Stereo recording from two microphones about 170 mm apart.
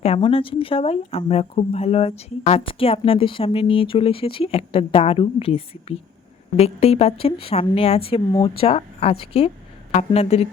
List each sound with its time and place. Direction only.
0.0 s speech: 35° left (ahead or behind)